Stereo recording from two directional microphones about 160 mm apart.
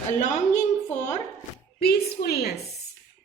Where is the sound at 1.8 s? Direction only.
80° left.